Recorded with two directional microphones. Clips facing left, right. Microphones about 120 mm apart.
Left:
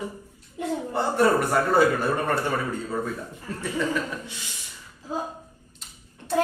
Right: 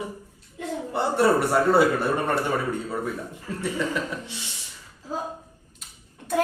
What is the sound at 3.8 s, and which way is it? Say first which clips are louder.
Speech: left 1 dB; 20° right (ahead or behind).